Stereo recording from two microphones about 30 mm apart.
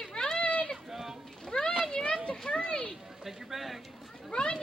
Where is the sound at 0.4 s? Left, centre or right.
Left.